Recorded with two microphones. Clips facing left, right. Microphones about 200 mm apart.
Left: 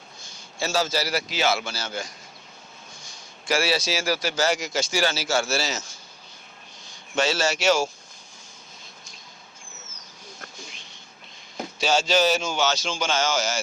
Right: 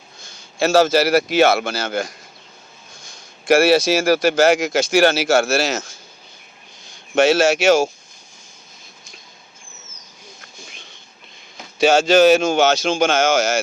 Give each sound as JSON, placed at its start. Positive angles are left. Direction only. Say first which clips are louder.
{"t": 0.6, "sound": "a man's voice", "louder": "right 11 dB", "side_deg": -75}
{"t": 3.4, "sound": "speech", "louder": "right 11 dB", "side_deg": -60}
{"t": 4.9, "sound": "speech", "louder": "right 11 dB", "side_deg": -80}
{"t": 5.5, "sound": "speech", "louder": "right 8 dB", "side_deg": -55}
{"t": 7.2, "sound": "speech", "louder": "right 9 dB", "side_deg": -50}
{"t": 11.8, "sound": "speech", "louder": "right 9 dB", "side_deg": -50}